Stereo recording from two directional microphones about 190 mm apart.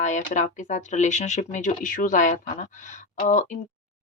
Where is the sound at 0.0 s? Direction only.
40° left (ahead or behind).